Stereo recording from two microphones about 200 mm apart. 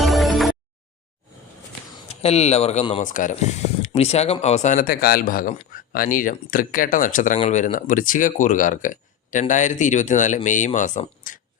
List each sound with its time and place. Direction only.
0.0 s music: centre (ahead or behind)
2.0 s speech: 30° left (ahead or behind)